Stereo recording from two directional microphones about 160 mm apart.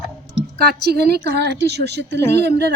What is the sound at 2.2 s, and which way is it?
Speech, 15° left (ahead or behind).